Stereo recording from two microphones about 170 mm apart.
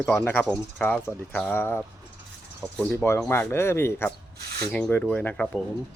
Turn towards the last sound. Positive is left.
turn(degrees=5)  # may be behind; listen again after turning